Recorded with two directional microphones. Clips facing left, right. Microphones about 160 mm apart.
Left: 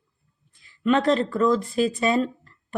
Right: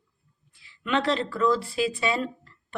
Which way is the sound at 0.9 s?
40° left (ahead or behind).